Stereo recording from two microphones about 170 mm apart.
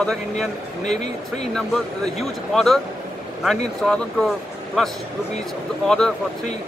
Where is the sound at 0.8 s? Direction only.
40° left (ahead or behind).